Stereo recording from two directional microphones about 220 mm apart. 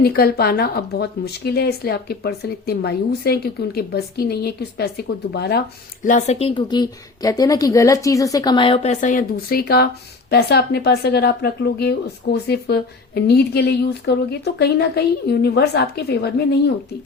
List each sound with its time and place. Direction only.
0.0 s speech: 45° left (ahead or behind)